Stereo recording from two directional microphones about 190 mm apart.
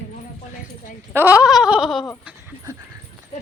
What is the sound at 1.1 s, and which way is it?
Speech, 10° right (ahead or behind).